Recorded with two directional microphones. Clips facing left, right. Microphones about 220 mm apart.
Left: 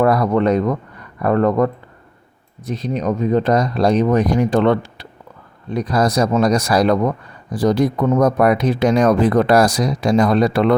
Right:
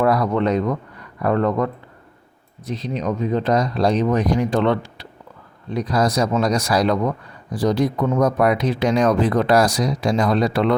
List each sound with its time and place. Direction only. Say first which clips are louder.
0.0 s speech: left 3 dB; 50° left (ahead or behind)